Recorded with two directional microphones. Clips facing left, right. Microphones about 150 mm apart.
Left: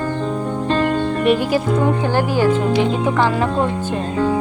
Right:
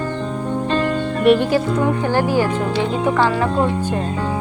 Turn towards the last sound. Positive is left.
turn(degrees=20)  # may be behind; listen again after turning